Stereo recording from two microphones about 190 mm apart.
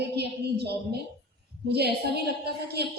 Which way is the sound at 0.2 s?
60° right (ahead or behind).